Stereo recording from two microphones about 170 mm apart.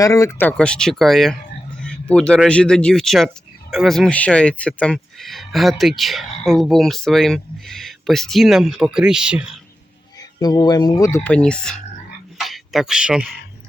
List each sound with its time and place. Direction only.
0.0 s speech: 20° left (ahead or behind); by 1.4 s centre (ahead or behind)
1.8 s a sound: 5° left (ahead or behind)
2.5 s speech: 5° left (ahead or behind)
10.2 s speech: 25° left (ahead or behind)
11.2 s speech: 5° left (ahead or behind)